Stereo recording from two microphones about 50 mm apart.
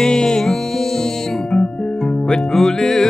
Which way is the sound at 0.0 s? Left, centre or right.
Centre.